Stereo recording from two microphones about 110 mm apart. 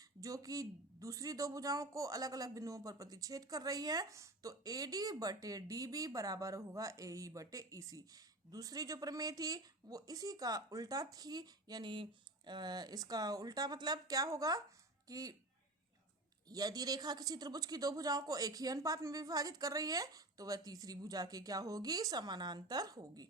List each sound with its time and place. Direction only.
0.2 s speech: 30° right (ahead or behind)
16.5 s speech: 35° right (ahead or behind)